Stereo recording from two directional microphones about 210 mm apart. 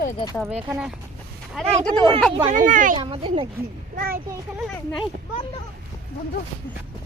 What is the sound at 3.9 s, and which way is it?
Speech, 45° right (ahead or behind).